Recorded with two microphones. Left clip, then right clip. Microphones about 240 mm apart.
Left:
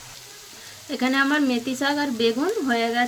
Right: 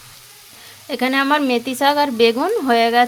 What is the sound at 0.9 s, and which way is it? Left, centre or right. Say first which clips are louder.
Frying: right 5 dB; right.